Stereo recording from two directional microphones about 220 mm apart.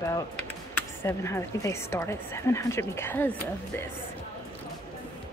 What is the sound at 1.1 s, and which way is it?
A woman's voice, 10° left (ahead or behind).